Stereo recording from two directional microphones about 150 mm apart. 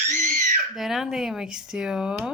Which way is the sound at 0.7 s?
Centre (ahead or behind).